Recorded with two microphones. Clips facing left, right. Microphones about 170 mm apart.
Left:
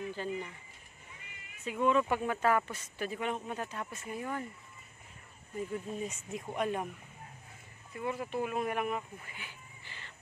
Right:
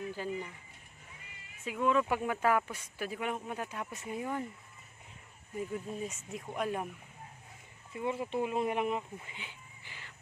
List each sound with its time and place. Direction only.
0.1 s speech: 10° right (ahead or behind)
1.6 s speech: centre (ahead or behind)
5.6 s speech: centre (ahead or behind)
7.9 s speech: 20° right (ahead or behind)